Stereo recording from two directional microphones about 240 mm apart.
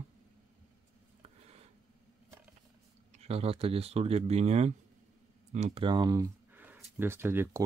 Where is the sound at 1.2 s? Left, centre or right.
Right.